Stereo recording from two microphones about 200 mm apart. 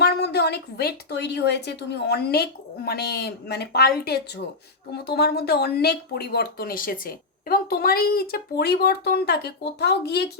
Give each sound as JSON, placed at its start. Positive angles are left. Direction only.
{"t": 0.0, "sound": "speech", "side_deg": 55}